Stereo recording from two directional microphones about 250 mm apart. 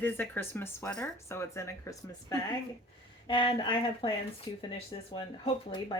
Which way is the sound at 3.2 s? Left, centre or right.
Centre.